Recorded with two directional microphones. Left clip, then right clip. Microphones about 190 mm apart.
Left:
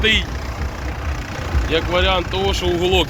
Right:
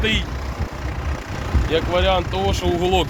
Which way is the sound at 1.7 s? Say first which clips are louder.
Left 1 dB; 70° right (ahead or behind).